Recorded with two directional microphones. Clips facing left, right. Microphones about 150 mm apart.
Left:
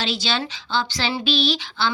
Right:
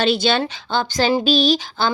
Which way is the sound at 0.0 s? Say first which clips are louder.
Right 8 dB; 55° right (ahead or behind).